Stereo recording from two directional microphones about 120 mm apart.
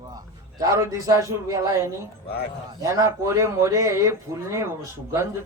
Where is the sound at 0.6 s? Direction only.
30° right (ahead or behind).